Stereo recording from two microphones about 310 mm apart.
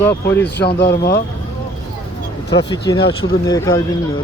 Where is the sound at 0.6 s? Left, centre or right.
Left.